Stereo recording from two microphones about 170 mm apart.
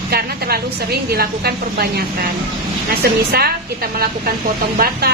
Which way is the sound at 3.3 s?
65° right (ahead or behind).